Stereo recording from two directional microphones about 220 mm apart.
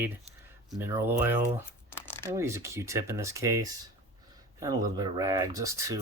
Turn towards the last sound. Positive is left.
turn(degrees=-15)  # may be behind; listen again after turning